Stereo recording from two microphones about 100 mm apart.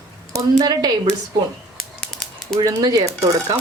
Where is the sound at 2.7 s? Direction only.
40° right (ahead or behind).